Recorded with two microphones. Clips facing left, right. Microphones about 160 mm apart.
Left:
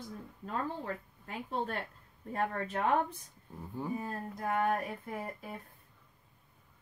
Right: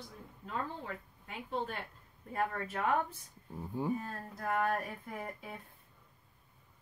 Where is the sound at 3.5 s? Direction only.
10° right (ahead or behind).